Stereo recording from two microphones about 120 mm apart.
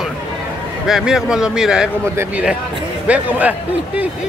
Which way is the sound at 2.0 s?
20° right (ahead or behind).